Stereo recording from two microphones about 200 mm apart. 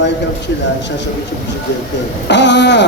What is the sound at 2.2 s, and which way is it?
Speech, 60° left (ahead or behind).